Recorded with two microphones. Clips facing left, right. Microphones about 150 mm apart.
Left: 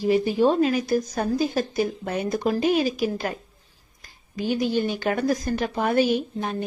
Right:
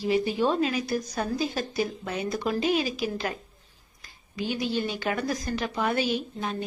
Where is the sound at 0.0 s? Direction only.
45° left (ahead or behind).